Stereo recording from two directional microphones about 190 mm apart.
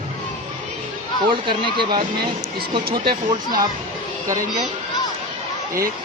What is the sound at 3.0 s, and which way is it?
Speech, 25° right (ahead or behind).